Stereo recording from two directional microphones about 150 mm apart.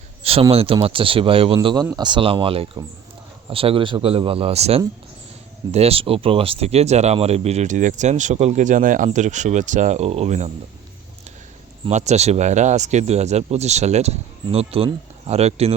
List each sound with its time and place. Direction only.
0.2 s a sound: 40° right (ahead or behind)
0.5 s speech: 40° right (ahead or behind)
1.5 s speech: 25° right (ahead or behind); by 10.5 s 50° right (ahead or behind)
11.9 s speech: 50° right (ahead or behind)